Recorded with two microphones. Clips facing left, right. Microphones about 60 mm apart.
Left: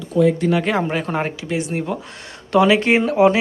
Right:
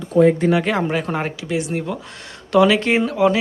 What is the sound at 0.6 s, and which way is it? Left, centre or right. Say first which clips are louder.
Speech: even; centre.